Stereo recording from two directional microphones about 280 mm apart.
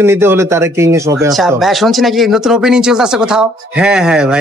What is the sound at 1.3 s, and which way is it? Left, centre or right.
A man's voice, centre.